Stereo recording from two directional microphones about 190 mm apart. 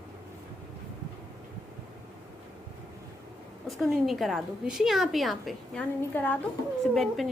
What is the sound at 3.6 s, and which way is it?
A woman's voice, centre (ahead or behind).